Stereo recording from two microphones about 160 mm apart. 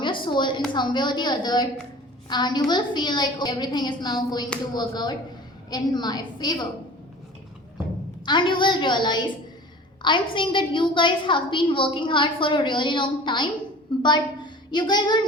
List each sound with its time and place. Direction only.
0.0 s a woman's voice: 30° left (ahead or behind)
8.2 s a woman's voice: 30° left (ahead or behind)